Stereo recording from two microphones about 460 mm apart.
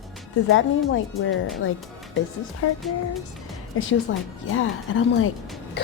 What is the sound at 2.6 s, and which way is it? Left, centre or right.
Speech, left.